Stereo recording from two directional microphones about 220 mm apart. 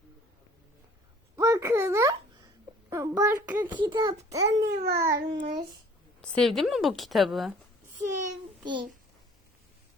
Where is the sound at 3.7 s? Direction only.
20° right (ahead or behind).